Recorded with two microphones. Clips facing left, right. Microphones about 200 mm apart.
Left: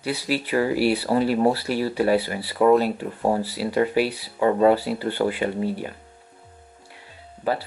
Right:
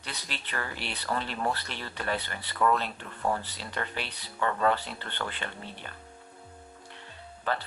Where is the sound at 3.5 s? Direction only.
10° left (ahead or behind).